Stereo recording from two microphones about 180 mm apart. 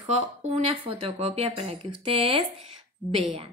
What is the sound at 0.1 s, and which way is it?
Speech, 35° right (ahead or behind).